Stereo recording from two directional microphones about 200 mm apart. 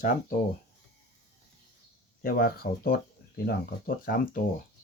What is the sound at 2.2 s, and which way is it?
Speech, 50° left (ahead or behind).